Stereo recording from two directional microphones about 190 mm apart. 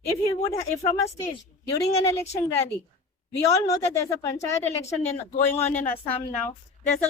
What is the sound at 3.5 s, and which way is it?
Speech, 15° left (ahead or behind).